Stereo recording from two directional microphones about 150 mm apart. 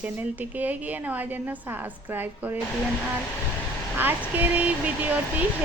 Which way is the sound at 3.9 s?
10° right (ahead or behind).